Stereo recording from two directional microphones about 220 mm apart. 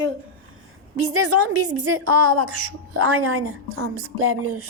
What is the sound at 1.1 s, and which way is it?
A woman's voice, 90° right.